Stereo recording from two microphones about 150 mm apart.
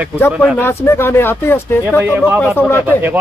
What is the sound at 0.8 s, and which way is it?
Speech, 15° left (ahead or behind).